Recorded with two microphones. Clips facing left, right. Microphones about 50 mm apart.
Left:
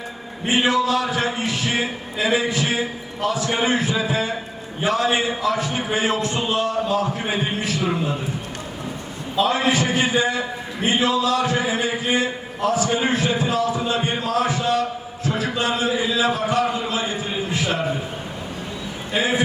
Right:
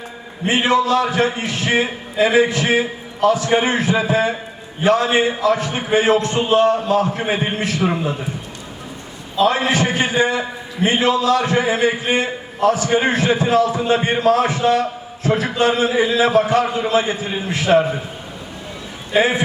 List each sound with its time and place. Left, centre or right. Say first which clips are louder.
0.4 s a man's voice: right 3 dB; right
9.4 s a man's voice: right 3 dB; right
19.1 s a man's voice: right 4 dB; right